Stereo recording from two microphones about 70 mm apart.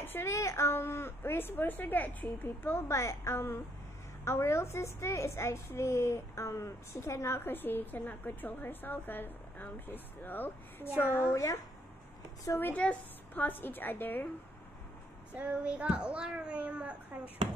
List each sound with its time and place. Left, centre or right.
0.0 s a woman's voice: left
11.3 s speech: left
12.5 s a woman's voice: left
15.3 s a child's voice: centre